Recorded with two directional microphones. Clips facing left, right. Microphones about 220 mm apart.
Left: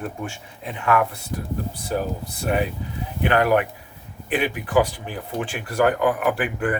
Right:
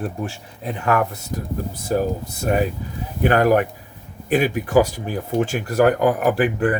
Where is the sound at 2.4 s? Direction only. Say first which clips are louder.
Right 3 dB; 45° right (ahead or behind).